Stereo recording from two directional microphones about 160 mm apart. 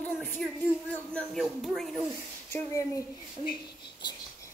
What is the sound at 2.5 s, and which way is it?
Speech, 15° left (ahead or behind).